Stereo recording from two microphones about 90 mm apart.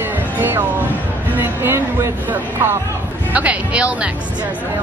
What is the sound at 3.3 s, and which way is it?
Speech, 15° right (ahead or behind).